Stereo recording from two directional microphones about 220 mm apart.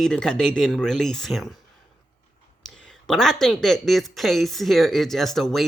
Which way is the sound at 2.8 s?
Centre (ahead or behind).